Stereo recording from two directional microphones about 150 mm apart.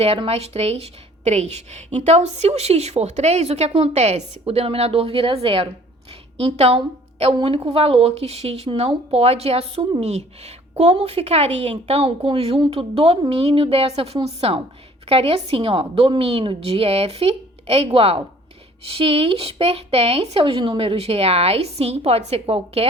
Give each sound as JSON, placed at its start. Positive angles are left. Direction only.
{"t": 0.0, "sound": "a woman's voice", "side_deg": -40}